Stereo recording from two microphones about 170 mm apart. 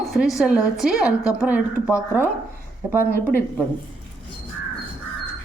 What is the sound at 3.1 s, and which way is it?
Speech, 15° left (ahead or behind).